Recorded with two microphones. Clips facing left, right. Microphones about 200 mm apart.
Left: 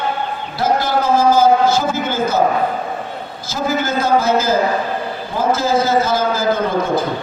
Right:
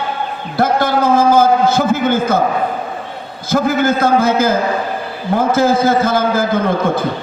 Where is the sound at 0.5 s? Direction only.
55° right (ahead or behind).